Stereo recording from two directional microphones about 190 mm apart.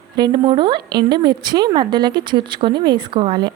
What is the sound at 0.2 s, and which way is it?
Speech, 25° right (ahead or behind).